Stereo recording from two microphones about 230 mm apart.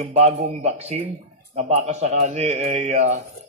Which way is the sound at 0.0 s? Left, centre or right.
Right.